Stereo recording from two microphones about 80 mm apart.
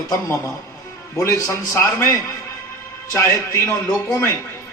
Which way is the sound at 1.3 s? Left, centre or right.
Left.